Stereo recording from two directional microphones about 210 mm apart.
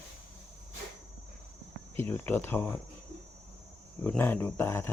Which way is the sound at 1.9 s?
10° left (ahead or behind).